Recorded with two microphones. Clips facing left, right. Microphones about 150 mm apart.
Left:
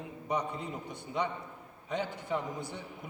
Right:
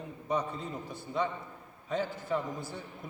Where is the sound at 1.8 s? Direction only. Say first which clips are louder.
Right 2 dB; 20° left (ahead or behind).